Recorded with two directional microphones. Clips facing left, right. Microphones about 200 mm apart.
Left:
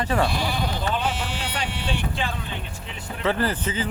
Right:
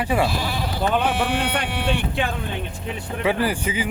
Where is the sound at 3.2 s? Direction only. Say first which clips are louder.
Right 2 dB; 10° right (ahead or behind).